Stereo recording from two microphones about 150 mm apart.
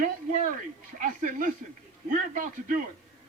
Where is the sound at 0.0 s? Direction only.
65° right (ahead or behind).